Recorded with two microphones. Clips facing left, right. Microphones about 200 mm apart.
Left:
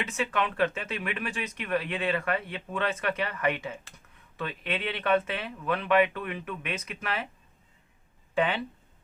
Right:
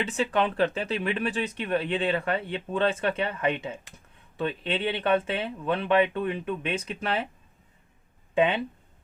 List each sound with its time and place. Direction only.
0.0 s speech: 30° right (ahead or behind)
8.4 s speech: 20° right (ahead or behind)